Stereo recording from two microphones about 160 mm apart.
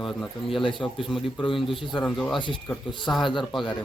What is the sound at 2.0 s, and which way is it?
Speech, 5° left (ahead or behind).